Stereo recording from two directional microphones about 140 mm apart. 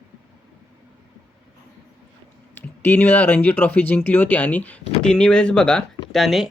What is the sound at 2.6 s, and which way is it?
Speech, 15° left (ahead or behind).